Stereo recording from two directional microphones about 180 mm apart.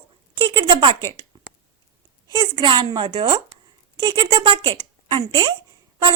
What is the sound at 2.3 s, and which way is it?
A woman's voice, 25° right (ahead or behind).